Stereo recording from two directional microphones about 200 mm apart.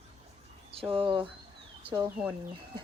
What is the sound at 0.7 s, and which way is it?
Speech, 30° right (ahead or behind).